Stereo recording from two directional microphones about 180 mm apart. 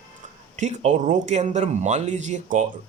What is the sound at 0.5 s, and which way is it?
Speech, 40° right (ahead or behind).